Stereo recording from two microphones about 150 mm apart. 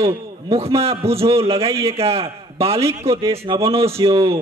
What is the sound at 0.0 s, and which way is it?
A man's voice, 40° right (ahead or behind).